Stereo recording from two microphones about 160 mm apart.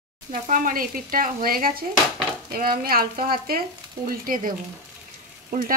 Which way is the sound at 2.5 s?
65° right (ahead or behind).